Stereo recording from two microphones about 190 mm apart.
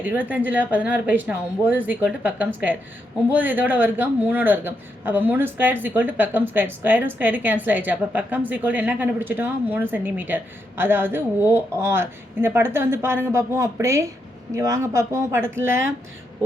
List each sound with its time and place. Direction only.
0.0 s a man's voice: 10° right (ahead or behind)